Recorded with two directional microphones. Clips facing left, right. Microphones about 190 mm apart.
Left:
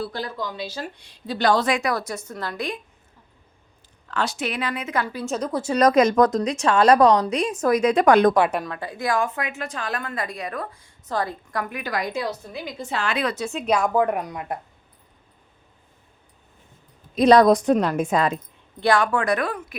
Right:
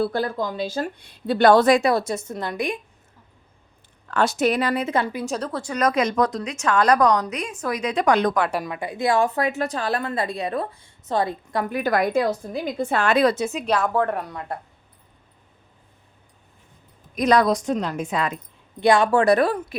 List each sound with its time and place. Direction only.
0.0 s speech: 50° right (ahead or behind)
1.6 s a woman's voice: 30° right (ahead or behind)
4.1 s speech: 50° right (ahead or behind); by 5.0 s 30° right (ahead or behind)
5.2 s speech: centre (ahead or behind)
5.5 s speech: 20° left (ahead or behind)
5.7 s a woman's voice: 40° left (ahead or behind)
8.6 s a woman's voice: 15° right (ahead or behind)
11.8 s speech: 55° right (ahead or behind)
13.7 s a woman's voice: 10° left (ahead or behind)
17.2 s a woman's voice: 30° left (ahead or behind)
17.4 s a woman's voice: 55° left (ahead or behind)
18.8 s speech: 20° right (ahead or behind)